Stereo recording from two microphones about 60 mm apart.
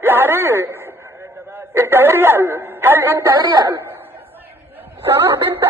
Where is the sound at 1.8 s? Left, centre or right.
Right.